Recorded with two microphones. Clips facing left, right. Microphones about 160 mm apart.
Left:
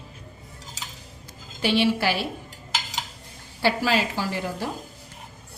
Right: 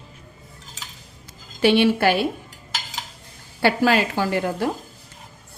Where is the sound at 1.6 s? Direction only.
60° right (ahead or behind).